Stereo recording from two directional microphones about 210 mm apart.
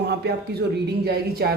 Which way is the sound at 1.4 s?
50° right (ahead or behind).